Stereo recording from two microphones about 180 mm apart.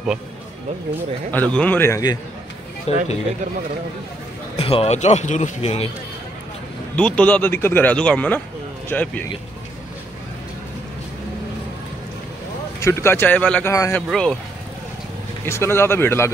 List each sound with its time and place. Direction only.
1.3 s speech: 10° left (ahead or behind)
2.9 s speech: 35° left (ahead or behind)
4.6 s speech: 30° left (ahead or behind)
7.0 s speech: 5° left (ahead or behind)
12.8 s speech: 15° left (ahead or behind)
14.0 s speech: 5° left (ahead or behind)
15.4 s speech: 15° left (ahead or behind)